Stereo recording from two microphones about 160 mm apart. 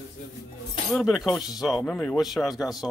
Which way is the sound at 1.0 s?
5° right (ahead or behind).